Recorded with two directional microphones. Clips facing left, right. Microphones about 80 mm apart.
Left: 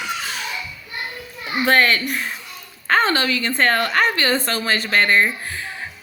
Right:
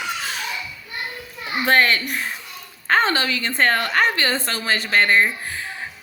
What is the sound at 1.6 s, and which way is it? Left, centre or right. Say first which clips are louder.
Speech: left 1 dB; right.